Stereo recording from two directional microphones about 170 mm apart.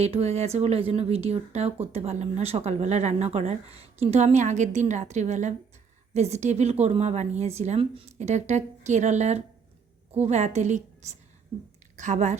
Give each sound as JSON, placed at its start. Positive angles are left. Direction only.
{"t": 0.0, "sound": "a woman's voice", "side_deg": -40}